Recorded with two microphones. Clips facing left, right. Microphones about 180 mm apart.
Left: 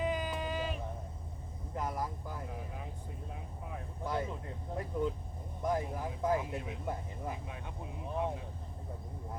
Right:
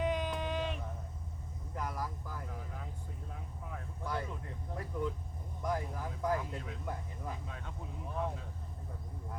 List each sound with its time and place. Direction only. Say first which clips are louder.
0.0 s a sound: even; 5° left (ahead or behind)
1.7 s vehicle: left 3 dB; 25° left (ahead or behind)
4.7 s speech: left 3 dB; 25° left (ahead or behind)